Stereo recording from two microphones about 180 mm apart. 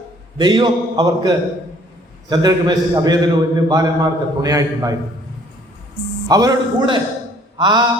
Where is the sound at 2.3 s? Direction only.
20° right (ahead or behind).